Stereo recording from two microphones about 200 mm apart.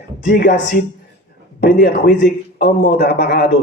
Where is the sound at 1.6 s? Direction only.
50° left (ahead or behind).